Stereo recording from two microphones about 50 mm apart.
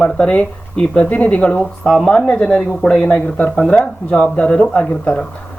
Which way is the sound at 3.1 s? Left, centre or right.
Left.